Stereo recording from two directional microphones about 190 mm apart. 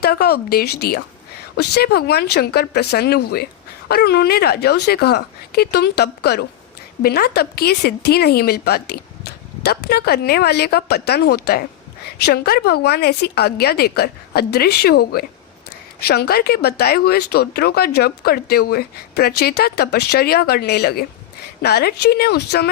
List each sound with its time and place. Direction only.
0.0 s speech: 55° left (ahead or behind)